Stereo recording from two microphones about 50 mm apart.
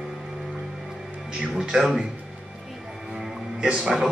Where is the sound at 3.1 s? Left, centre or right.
Centre.